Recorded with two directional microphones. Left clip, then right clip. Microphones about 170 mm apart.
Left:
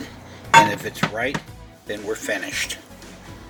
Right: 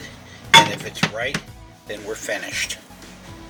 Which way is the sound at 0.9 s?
60° left (ahead or behind).